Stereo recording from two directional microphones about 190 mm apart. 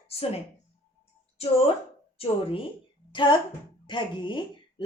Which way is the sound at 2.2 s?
30° left (ahead or behind).